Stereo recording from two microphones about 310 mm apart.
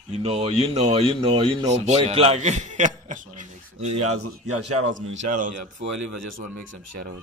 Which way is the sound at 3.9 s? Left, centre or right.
Right.